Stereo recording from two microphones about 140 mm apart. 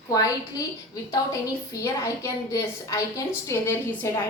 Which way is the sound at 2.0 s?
20° left (ahead or behind).